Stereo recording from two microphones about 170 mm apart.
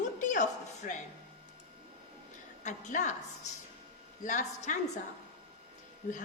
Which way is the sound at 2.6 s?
45° left (ahead or behind).